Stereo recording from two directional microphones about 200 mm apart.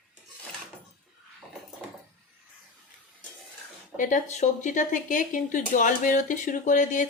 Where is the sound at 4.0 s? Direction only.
35° left (ahead or behind).